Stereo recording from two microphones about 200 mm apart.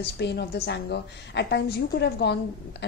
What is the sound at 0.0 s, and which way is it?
A woman's voice, 55° left (ahead or behind).